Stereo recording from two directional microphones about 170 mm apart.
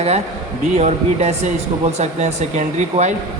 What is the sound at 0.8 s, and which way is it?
A man's voice, 40° right (ahead or behind).